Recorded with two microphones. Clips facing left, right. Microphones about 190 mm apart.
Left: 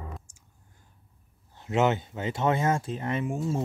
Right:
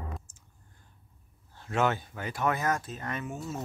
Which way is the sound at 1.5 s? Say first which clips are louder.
Left 4 dB; 20° left (ahead or behind).